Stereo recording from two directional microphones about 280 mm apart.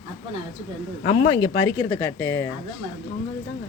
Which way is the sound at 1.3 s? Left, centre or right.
Centre.